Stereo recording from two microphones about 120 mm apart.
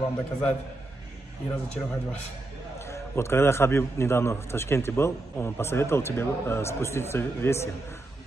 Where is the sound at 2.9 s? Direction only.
20° left (ahead or behind).